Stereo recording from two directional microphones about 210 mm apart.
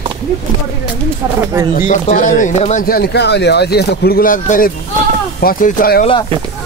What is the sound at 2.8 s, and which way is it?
Speech, 45° left (ahead or behind).